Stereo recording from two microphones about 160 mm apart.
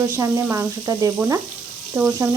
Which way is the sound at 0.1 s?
15° right (ahead or behind).